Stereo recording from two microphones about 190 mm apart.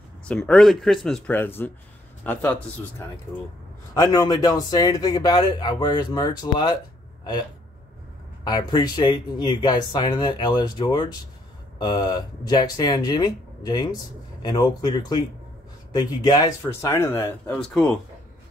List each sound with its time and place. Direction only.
0.2 s speech: 5° left (ahead or behind)
3.9 s a man's voice: 20° left (ahead or behind)
8.5 s a man's voice: 20° left (ahead or behind); by 17.9 s 5° left (ahead or behind)